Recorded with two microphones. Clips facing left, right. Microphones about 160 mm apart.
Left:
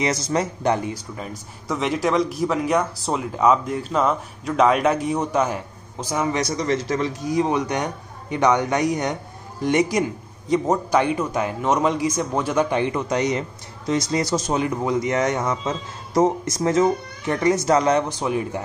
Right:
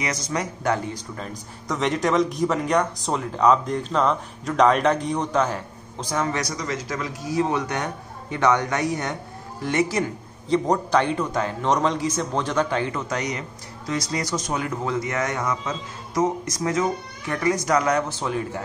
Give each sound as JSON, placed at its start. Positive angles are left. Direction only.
{"t": 0.0, "sound": "a man's voice", "side_deg": 30}
{"t": 1.7, "sound": "speech", "side_deg": 0}
{"t": 7.2, "sound": "a man's voice", "side_deg": 15}